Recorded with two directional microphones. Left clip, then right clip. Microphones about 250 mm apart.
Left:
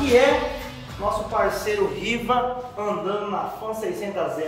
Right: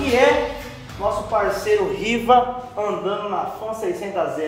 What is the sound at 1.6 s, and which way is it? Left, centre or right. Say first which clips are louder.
Speech: right 4 dB; centre.